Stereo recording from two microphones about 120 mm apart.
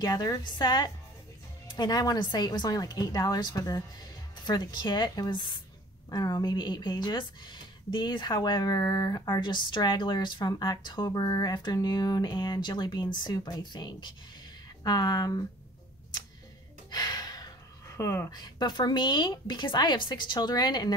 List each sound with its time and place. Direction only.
0.0 s speech: 30° left (ahead or behind)
16.9 s gasp: 30° left (ahead or behind)
18.3 s speech: 35° left (ahead or behind)